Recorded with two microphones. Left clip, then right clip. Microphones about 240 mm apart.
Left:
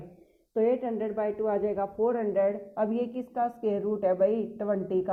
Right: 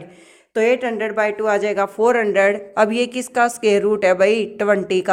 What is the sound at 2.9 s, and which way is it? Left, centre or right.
Speech, right.